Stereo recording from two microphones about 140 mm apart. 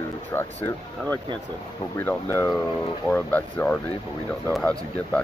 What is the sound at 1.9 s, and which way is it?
Speech, 15° left (ahead or behind).